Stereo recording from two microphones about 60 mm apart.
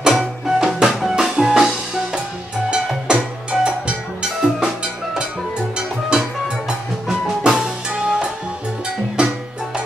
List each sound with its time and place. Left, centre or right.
0.0 s music: centre
7.1 s music: centre